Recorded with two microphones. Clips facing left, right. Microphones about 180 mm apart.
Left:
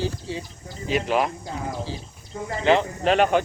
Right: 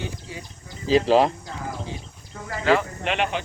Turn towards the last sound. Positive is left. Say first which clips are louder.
# left 6 dB
turn(degrees=45)  # may be behind; listen again after turning